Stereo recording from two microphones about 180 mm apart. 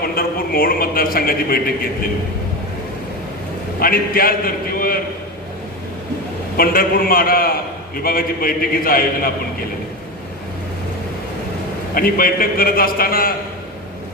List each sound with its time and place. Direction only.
0.0 s a man's voice: 55° left (ahead or behind)
3.8 s a man's voice: 55° left (ahead or behind)
6.6 s a man's voice: 55° left (ahead or behind)
11.9 s a man's voice: 55° left (ahead or behind)